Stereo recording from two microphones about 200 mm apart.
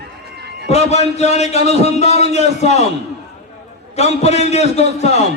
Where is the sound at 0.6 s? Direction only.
35° left (ahead or behind).